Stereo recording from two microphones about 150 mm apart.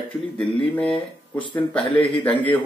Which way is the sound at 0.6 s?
5° left (ahead or behind).